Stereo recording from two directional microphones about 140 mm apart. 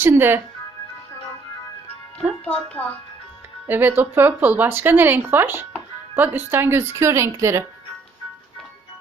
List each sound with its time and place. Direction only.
0.0 s speech: 15° right (ahead or behind)
2.4 s speech: 10° left (ahead or behind)
3.7 s speech: 15° right (ahead or behind)